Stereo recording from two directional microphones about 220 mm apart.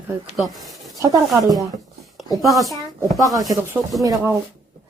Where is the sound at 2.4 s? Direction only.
Centre (ahead or behind).